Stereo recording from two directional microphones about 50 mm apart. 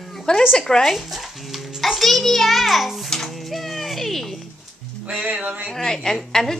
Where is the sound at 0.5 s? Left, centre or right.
Centre.